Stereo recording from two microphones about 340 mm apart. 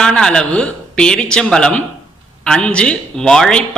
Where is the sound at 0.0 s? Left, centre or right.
Centre.